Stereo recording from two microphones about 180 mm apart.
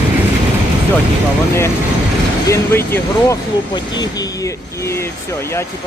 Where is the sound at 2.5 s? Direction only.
15° left (ahead or behind).